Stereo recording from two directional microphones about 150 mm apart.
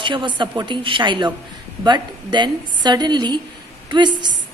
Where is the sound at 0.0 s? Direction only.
30° right (ahead or behind).